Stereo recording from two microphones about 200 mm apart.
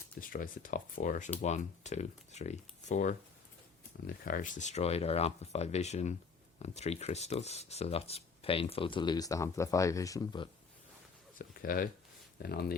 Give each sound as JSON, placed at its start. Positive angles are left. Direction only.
{"t": 0.2, "sound": "speech", "side_deg": 45}
{"t": 11.3, "sound": "a sound", "side_deg": 45}
{"t": 12.4, "sound": "speech", "side_deg": 50}